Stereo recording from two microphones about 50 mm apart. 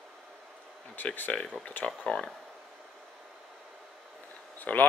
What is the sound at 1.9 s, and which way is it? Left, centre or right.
Speech, centre.